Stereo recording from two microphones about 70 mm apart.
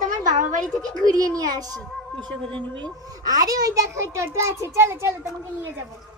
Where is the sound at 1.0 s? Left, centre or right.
Right.